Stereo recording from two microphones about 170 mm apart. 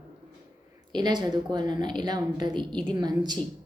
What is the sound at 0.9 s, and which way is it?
Speech, 25° right (ahead or behind).